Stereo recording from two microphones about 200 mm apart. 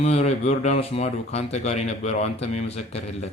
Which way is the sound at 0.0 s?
35° left (ahead or behind).